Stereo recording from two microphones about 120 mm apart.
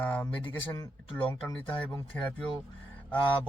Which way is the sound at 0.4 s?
30° left (ahead or behind).